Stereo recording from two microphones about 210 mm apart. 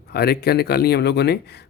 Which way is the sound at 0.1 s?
50° left (ahead or behind).